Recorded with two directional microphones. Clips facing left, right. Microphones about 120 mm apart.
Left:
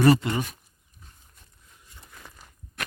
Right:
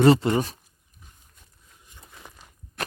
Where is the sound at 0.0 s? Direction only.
25° right (ahead or behind).